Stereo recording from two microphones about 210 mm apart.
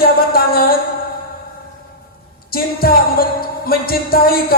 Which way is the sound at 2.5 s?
45° left (ahead or behind).